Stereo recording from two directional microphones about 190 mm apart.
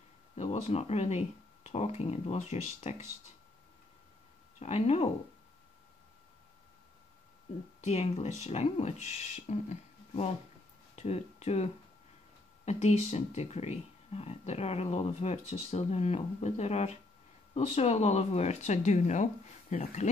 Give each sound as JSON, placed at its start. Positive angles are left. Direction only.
{"t": 0.4, "sound": "speech", "side_deg": 35}
{"t": 4.6, "sound": "speech", "side_deg": 35}
{"t": 7.8, "sound": "speech", "side_deg": 35}